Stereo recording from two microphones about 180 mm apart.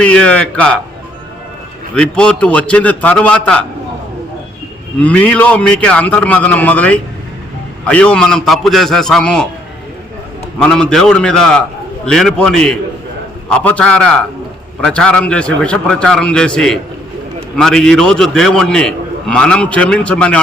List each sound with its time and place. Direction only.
0.0 s a man's voice: 5° left (ahead or behind)
2.0 s a man's voice: 5° left (ahead or behind)
4.9 s a man's voice: 5° left (ahead or behind)
10.6 s a man's voice: 5° left (ahead or behind)